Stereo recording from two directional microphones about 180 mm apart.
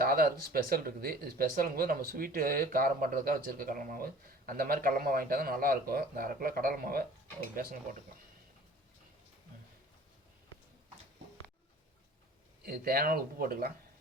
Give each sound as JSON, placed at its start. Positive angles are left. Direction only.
{"t": 0.0, "sound": "speech", "side_deg": -55}
{"t": 12.6, "sound": "speech", "side_deg": -55}